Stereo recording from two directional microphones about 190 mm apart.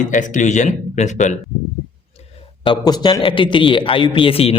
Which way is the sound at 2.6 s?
20° left (ahead or behind).